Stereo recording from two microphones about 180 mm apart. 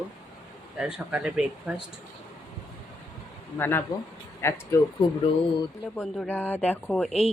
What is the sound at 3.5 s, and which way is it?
Speech, 10° left (ahead or behind).